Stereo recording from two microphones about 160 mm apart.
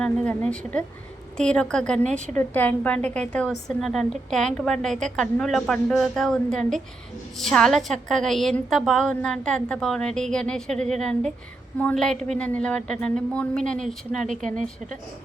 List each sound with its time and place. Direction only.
0.0 s a woman's voice: 5° left (ahead or behind)
14.3 s speech: 50° right (ahead or behind)